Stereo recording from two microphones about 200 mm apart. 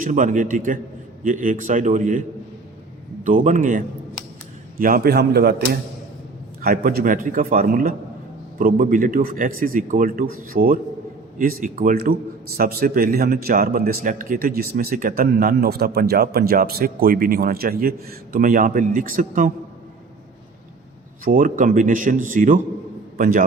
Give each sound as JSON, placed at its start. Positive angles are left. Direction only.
{"t": 0.0, "sound": "speech", "side_deg": -40}
{"t": 3.2, "sound": "speech", "side_deg": -40}
{"t": 21.2, "sound": "a man's voice", "side_deg": -40}